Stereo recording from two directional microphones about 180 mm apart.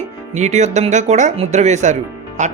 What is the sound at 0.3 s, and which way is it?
Speech, 40° right (ahead or behind).